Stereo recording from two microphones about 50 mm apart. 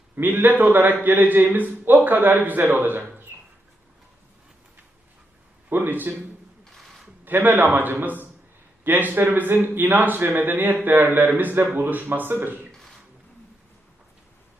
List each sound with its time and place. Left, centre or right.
0.2 s a man's voice: right
5.7 s a man's voice: right
6.7 s a sound: centre
7.3 s speech: right